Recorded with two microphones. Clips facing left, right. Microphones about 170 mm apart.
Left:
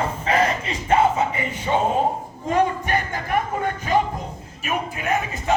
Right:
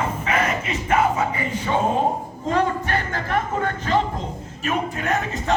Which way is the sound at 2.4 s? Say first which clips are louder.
Left 1 dB; 15° left (ahead or behind).